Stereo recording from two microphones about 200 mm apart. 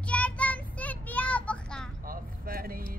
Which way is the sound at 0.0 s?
5° left (ahead or behind).